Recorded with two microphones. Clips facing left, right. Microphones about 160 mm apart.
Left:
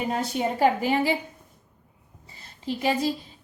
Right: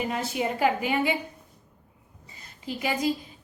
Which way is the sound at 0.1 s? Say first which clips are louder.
Left 2 dB; 35° left (ahead or behind).